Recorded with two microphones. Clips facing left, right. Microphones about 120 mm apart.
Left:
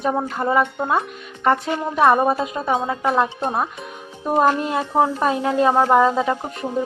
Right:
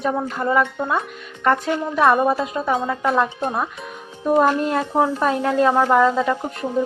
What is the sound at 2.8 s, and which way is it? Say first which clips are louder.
Speech: even; 5° left (ahead or behind).